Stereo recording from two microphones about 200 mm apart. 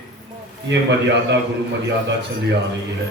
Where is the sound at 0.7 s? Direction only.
60° right (ahead or behind).